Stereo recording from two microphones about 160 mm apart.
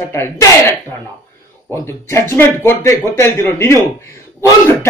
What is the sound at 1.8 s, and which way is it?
Speech, 15° left (ahead or behind).